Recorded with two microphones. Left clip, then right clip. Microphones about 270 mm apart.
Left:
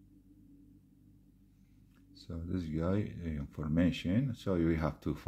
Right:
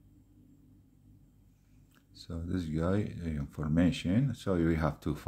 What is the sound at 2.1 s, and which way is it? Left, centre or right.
Speech, centre.